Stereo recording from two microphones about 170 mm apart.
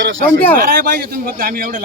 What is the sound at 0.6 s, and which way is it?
A man's voice, 60° right (ahead or behind).